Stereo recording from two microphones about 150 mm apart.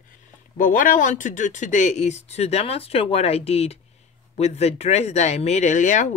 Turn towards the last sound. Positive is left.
turn(degrees=55)  # may be behind; listen again after turning